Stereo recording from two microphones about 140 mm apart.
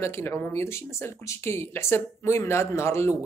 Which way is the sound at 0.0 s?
20° left (ahead or behind).